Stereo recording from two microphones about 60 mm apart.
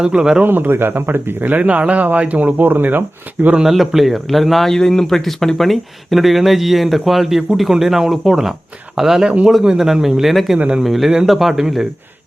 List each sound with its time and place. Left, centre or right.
0.0 s a man's voice: centre
0.4 s speech: right
3.5 s a man's voice: centre